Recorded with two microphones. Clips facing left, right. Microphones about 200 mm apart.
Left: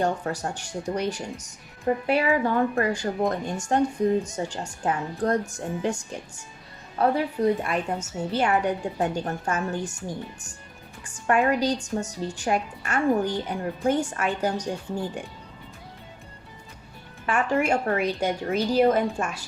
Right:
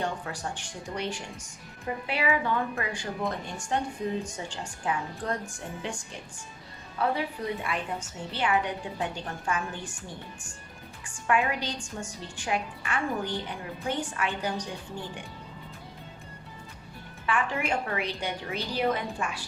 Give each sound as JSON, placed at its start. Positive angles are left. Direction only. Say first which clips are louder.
{"t": 0.0, "sound": "a woman's voice", "louder": "left 7 dB", "side_deg": 45}
{"t": 11.0, "sound": "a woman's voice", "louder": "left 5 dB", "side_deg": 40}
{"t": 17.2, "sound": "a woman's voice", "louder": "left 6 dB", "side_deg": 45}